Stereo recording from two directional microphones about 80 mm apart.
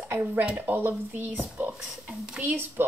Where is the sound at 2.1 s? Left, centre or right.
Centre.